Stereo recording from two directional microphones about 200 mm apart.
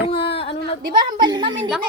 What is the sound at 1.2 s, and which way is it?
Speech, 20° right (ahead or behind).